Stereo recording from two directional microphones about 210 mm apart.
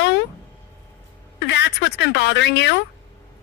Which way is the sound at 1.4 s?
55° left (ahead or behind).